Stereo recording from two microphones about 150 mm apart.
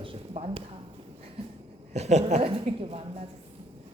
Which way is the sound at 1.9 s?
45° right (ahead or behind).